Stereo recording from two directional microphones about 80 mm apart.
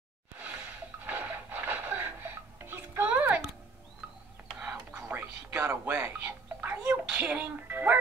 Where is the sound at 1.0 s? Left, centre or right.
Right.